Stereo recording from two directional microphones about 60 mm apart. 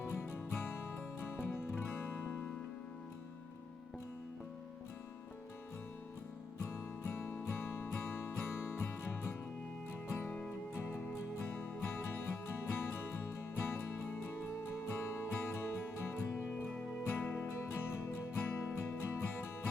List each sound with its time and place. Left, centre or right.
0.0 s music: left
6.7 s music: left
10.2 s music: left
11.4 s music: left